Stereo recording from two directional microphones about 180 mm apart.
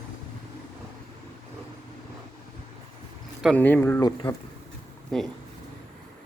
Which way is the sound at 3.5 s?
10° left (ahead or behind).